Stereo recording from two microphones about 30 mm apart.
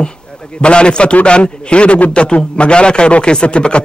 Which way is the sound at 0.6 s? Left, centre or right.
Left.